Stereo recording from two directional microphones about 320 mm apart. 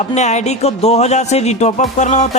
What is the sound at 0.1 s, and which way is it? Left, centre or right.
Speech, left.